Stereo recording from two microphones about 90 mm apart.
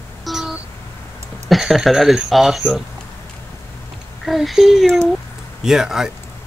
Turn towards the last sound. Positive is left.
turn(degrees=-5)  # may be behind; listen again after turning